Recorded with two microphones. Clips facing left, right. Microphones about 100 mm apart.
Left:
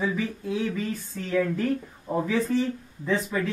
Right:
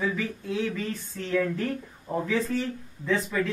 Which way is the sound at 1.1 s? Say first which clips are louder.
Left 1 dB; 10° left (ahead or behind).